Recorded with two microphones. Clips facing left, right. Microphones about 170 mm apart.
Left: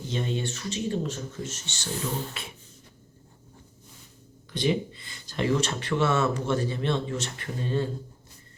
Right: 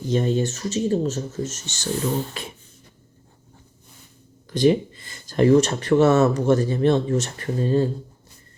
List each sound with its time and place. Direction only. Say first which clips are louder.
0.1 s speech: right 9 dB; 40° right (ahead or behind)
4.5 s speech: right 8 dB; 45° right (ahead or behind)